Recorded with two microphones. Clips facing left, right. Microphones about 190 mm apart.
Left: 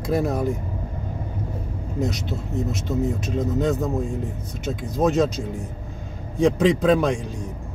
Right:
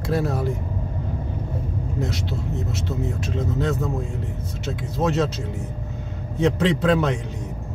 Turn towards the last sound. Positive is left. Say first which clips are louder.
# left 2 dB
turn(degrees=10)  # may be behind; listen again after turning